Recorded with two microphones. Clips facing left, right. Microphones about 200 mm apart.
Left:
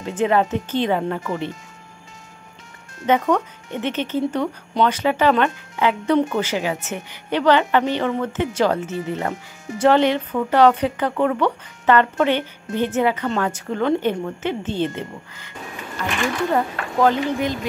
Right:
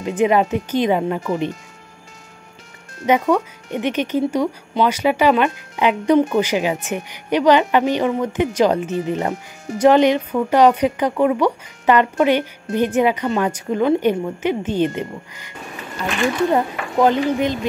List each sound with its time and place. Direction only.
0.0 s a woman's voice: 15° right (ahead or behind)
3.1 s a woman's voice: 10° right (ahead or behind)
16.0 s a sound: 20° right (ahead or behind)
16.5 s speech: 20° right (ahead or behind)